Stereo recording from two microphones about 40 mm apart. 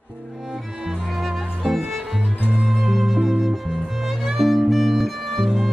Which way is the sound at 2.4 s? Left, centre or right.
Right.